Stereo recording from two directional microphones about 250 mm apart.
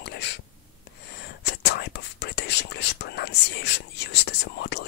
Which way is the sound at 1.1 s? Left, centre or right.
Left.